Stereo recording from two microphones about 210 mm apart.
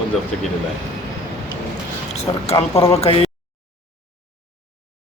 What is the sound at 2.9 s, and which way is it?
Speech, 30° left (ahead or behind).